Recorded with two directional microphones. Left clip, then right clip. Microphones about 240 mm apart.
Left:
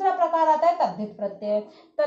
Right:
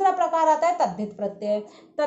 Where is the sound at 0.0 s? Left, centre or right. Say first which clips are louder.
Right 1 dB; right.